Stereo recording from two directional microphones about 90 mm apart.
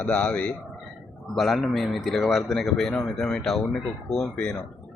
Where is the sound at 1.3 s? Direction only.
Centre (ahead or behind).